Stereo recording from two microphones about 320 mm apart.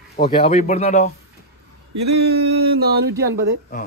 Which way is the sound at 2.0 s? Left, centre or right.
Right.